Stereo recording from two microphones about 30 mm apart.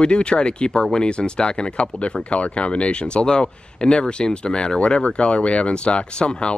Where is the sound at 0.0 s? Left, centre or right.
Left.